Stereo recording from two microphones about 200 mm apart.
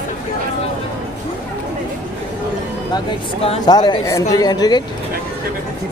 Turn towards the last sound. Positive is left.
turn(degrees=20)  # may be behind; listen again after turning